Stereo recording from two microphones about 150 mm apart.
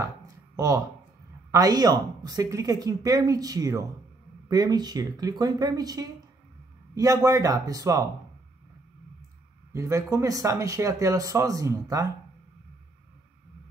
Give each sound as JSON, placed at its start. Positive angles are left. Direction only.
{"t": 0.6, "sound": "speech", "side_deg": -20}
{"t": 9.7, "sound": "speech", "side_deg": -20}